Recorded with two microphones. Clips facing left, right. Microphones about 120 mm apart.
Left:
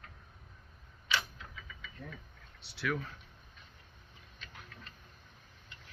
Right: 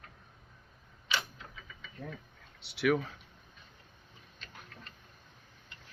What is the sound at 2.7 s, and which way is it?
Speech, 90° right.